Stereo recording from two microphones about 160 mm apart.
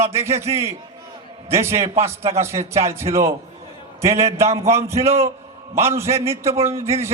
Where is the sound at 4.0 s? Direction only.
15° right (ahead or behind).